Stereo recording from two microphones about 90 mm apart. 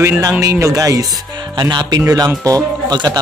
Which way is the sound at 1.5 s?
55° right (ahead or behind).